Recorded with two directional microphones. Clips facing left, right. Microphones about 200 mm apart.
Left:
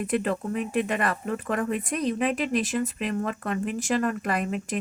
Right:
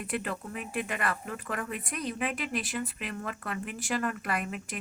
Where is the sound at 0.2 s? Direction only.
35° left (ahead or behind).